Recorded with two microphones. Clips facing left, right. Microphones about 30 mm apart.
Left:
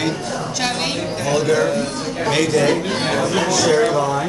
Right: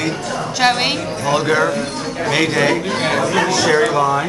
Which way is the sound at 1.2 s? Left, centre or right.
Right.